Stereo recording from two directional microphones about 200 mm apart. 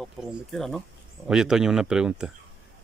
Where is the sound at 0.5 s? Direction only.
Centre (ahead or behind).